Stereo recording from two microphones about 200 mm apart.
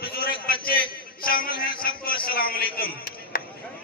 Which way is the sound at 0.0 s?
50° left (ahead or behind).